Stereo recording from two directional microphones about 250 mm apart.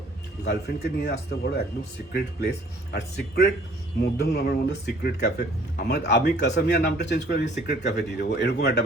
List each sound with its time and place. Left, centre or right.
0.4 s speech: left